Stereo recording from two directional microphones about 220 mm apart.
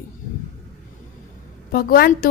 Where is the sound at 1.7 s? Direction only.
40° left (ahead or behind).